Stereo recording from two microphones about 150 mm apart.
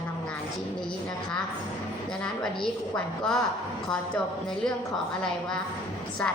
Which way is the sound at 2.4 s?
5° left (ahead or behind).